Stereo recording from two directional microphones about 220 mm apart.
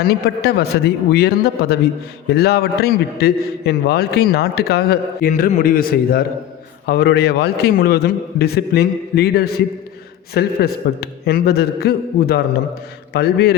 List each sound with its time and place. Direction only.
0.0 s a man's voice: 45° left (ahead or behind)